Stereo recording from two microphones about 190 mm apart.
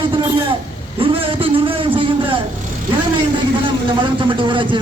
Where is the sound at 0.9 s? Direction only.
30° right (ahead or behind).